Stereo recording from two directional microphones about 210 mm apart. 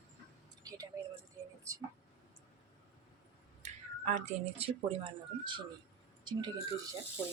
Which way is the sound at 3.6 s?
35° right (ahead or behind).